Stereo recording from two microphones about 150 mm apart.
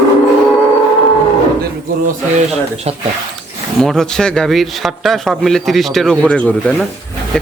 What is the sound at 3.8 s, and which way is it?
A man's voice, 5° left (ahead or behind).